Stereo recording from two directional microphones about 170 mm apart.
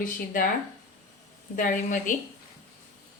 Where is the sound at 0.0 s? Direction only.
55° left (ahead or behind).